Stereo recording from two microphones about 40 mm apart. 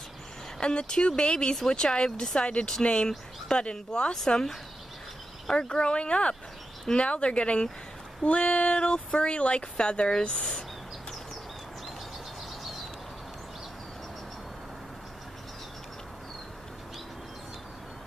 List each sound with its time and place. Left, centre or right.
0.6 s speech: left
2.3 s speech: left
5.5 s speech: centre